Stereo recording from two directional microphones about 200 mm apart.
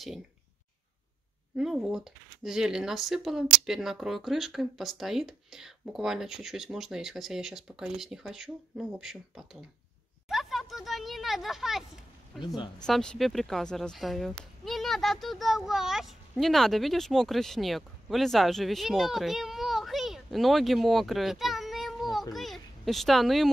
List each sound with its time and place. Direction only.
1.6 s speech: centre (ahead or behind)
10.2 s a sound: centre (ahead or behind)
12.5 s speech: 20° left (ahead or behind)
12.8 s speech: 5° left (ahead or behind)